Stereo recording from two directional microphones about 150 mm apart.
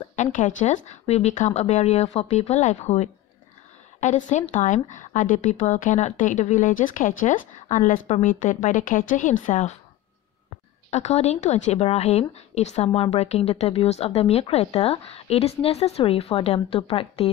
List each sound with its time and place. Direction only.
0.1 s a woman's voice: 55° left (ahead or behind)
10.9 s a woman's voice: 45° left (ahead or behind)